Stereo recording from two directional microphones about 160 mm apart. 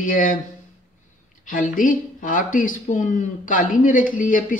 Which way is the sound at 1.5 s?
55° left (ahead or behind).